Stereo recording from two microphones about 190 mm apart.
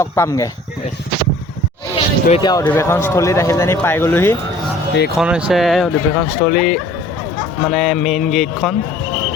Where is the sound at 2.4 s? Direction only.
20° left (ahead or behind).